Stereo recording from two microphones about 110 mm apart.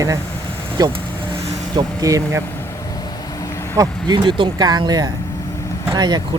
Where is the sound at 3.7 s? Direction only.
35° right (ahead or behind).